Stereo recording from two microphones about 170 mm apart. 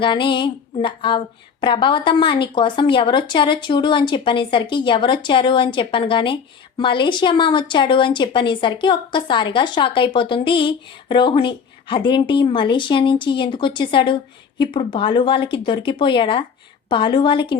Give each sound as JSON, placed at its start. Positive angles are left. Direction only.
{"t": 0.0, "sound": "speech", "side_deg": 30}